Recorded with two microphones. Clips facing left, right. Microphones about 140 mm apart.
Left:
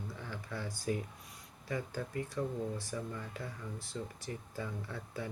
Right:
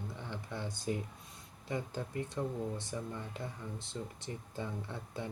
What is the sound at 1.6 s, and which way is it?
Speech, 20° right (ahead or behind).